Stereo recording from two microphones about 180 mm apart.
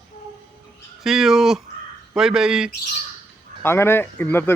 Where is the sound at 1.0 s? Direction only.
Centre (ahead or behind).